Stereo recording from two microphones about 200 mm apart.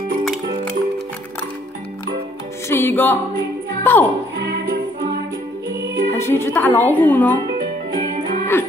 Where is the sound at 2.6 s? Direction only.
10° left (ahead or behind).